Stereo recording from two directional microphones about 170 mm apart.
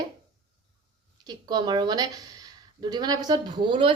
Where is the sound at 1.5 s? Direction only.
25° right (ahead or behind).